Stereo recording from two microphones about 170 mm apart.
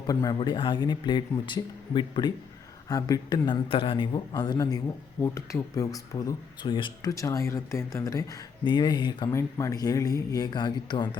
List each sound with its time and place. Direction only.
0.1 s speech: 20° left (ahead or behind)